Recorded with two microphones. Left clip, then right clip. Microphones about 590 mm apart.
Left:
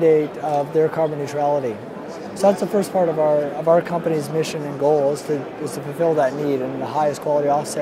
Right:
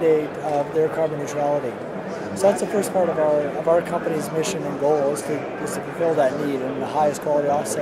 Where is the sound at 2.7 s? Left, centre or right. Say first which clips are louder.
Left 2 dB; left.